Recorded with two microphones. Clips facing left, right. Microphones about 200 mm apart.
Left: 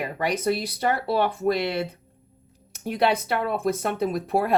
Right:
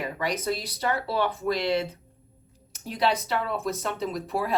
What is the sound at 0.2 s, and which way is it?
Speech, 60° left (ahead or behind).